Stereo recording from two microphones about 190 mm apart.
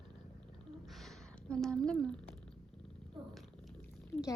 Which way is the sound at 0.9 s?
Centre (ahead or behind).